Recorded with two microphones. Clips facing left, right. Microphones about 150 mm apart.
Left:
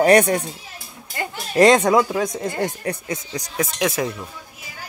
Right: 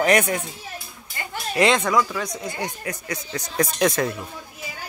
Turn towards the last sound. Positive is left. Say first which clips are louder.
# right 1 dB
turn(degrees=5)  # may be behind; listen again after turning